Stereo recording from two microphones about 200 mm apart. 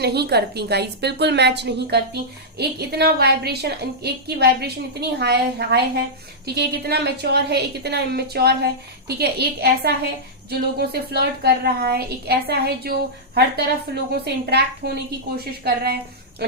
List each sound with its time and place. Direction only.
0.0 s a woman's voice: 55° right (ahead or behind)